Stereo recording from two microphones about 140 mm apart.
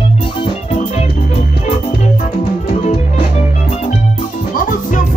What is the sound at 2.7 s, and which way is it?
Music, 45° left (ahead or behind).